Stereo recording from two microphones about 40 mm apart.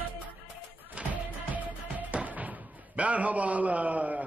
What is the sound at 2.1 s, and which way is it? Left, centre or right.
A man's voice, right.